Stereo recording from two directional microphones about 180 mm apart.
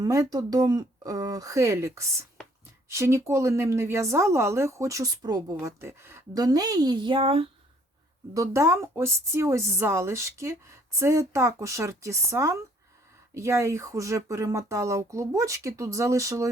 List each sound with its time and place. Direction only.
0.0 s speech: 20° right (ahead or behind)
8.3 s speech: 15° right (ahead or behind)